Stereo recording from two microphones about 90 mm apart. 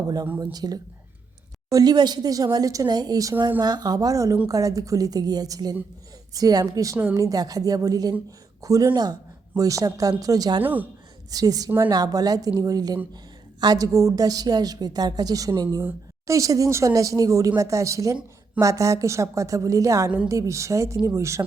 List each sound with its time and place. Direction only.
0.3 s a woman's voice: 45° right (ahead or behind)
8.9 s a woman's voice: 50° right (ahead or behind)
9.6 s a woman's voice: 40° right (ahead or behind)
10.6 s speech: 20° right (ahead or behind)
11.3 s a woman's voice: 45° right (ahead or behind)